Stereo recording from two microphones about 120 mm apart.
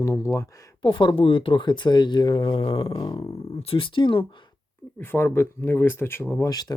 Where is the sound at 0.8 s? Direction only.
40° left (ahead or behind).